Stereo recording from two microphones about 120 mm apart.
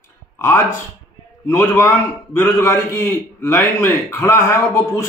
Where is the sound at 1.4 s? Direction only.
20° left (ahead or behind).